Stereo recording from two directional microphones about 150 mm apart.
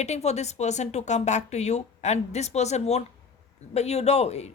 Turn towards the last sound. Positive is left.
turn(degrees=45)  # may be behind; listen again after turning